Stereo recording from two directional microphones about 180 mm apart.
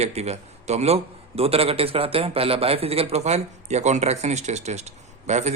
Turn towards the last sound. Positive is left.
turn(degrees=-40)  # may be behind; listen again after turning